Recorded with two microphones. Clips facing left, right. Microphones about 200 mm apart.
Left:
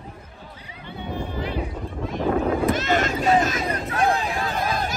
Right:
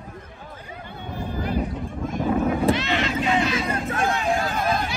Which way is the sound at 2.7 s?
45° left (ahead or behind).